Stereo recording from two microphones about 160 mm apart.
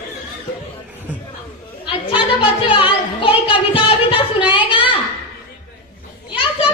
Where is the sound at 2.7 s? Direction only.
35° left (ahead or behind).